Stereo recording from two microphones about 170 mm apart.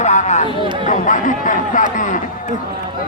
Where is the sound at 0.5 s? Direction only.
30° right (ahead or behind).